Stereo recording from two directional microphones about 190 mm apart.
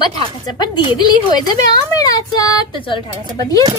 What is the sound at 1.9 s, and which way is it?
Speech, 20° left (ahead or behind).